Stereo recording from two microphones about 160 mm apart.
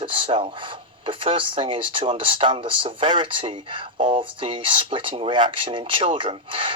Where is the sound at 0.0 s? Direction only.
35° right (ahead or behind).